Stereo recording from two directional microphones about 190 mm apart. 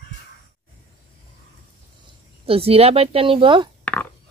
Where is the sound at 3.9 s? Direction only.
10° left (ahead or behind).